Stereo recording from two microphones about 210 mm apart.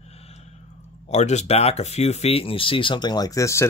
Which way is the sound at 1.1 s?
30° left (ahead or behind).